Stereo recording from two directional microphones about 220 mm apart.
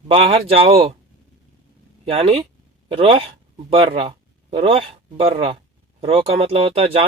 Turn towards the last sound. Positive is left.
turn(degrees=-25)  # may be behind; listen again after turning